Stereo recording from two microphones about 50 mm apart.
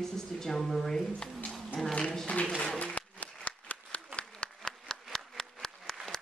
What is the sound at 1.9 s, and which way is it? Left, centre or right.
Applause, centre.